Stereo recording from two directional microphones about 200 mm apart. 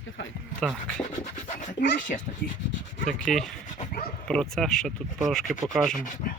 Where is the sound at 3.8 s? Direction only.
45° left (ahead or behind).